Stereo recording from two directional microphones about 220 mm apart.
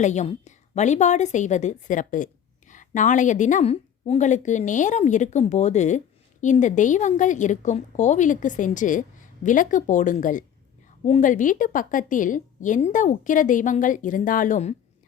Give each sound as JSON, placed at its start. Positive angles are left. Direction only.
{"t": 0.0, "sound": "a woman's voice", "side_deg": 30}